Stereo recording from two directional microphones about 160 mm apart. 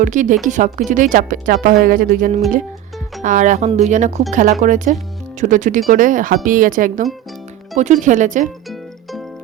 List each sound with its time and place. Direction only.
0.0 s speech: 50° right (ahead or behind)
3.2 s speech: 50° right (ahead or behind)
8.7 s music: centre (ahead or behind)